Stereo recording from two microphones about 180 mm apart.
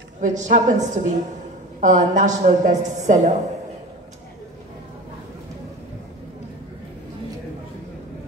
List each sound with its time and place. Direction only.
0.2 s a woman's voice: 45° right (ahead or behind)